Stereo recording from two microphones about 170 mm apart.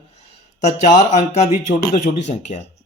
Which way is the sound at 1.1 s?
40° left (ahead or behind).